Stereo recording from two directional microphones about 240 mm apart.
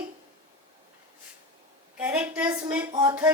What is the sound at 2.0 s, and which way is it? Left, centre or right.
A woman's voice, centre.